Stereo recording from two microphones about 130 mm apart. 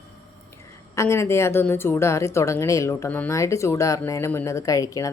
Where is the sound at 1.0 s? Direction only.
20° left (ahead or behind).